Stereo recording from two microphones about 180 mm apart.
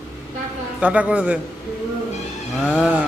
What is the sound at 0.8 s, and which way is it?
Speech, 10° right (ahead or behind).